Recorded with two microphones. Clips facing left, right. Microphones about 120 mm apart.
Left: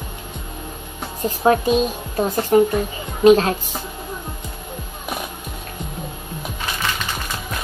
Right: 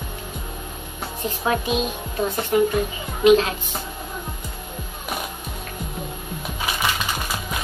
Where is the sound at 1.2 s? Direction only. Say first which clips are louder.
Left 7 dB; 40° left (ahead or behind).